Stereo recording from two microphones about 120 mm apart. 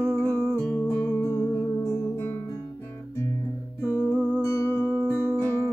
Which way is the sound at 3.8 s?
15° left (ahead or behind).